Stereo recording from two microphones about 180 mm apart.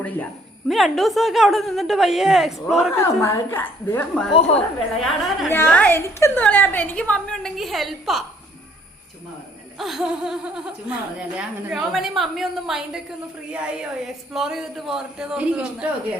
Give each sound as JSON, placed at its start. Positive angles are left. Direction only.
{"t": 0.7, "sound": "a woman's voice", "side_deg": 0}
{"t": 3.0, "sound": "a woman's voice", "side_deg": 15}
{"t": 4.4, "sound": "a woman's voice", "side_deg": 35}
{"t": 5.0, "sound": "a woman's voice", "side_deg": 0}
{"t": 5.5, "sound": "a woman's voice", "side_deg": 10}
{"t": 9.7, "sound": "a woman's voice", "side_deg": 0}